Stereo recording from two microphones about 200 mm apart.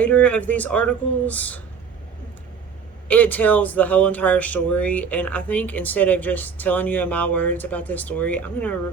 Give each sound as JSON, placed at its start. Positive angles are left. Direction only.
{"t": 0.0, "sound": "speech", "side_deg": 5}
{"t": 3.1, "sound": "speech", "side_deg": 10}